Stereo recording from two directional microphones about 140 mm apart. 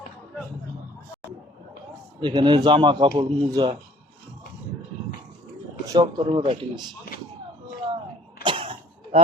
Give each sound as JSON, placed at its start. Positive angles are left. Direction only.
{"t": 2.2, "sound": "speech", "side_deg": -35}
{"t": 5.9, "sound": "speech", "side_deg": -30}
{"t": 7.1, "sound": "a sound", "side_deg": 90}
{"t": 8.4, "sound": "throat clearing", "side_deg": -40}